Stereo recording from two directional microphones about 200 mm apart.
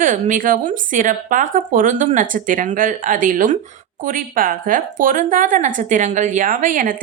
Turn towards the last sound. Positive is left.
turn(degrees=-45)  # may be behind; listen again after turning